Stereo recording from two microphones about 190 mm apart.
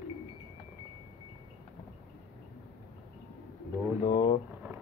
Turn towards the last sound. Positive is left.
turn(degrees=50)  # may be behind; listen again after turning